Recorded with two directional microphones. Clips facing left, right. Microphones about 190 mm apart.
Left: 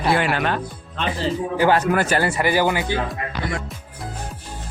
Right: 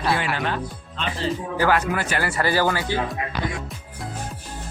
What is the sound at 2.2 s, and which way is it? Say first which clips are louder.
Speech: left 2 dB; 20° left (ahead or behind).